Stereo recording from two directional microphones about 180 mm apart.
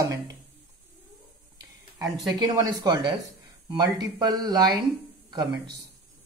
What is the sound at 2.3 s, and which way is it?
Speech, 20° right (ahead or behind).